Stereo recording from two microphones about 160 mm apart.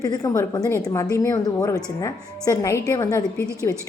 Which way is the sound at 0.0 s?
25° left (ahead or behind).